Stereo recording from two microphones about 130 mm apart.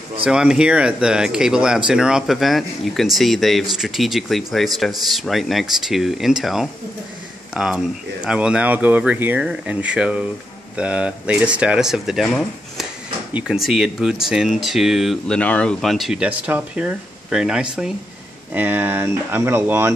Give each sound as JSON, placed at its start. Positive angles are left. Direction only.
{"t": 0.2, "sound": "speech", "side_deg": -5}
{"t": 13.3, "sound": "speech", "side_deg": -10}